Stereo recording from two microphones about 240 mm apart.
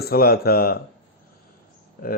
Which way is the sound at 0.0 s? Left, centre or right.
Left.